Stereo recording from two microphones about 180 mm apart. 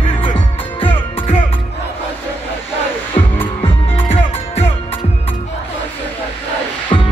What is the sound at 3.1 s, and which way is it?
Music, 30° left (ahead or behind).